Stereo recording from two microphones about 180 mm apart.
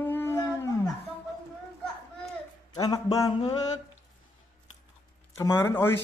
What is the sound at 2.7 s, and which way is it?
Speech, 20° left (ahead or behind).